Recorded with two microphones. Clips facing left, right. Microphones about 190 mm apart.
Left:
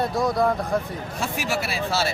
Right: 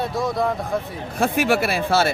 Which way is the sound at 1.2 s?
55° right (ahead or behind).